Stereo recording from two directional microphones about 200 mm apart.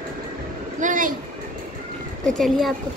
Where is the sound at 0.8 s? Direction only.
40° right (ahead or behind).